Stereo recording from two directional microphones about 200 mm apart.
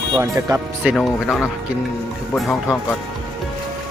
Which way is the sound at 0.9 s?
Centre (ahead or behind).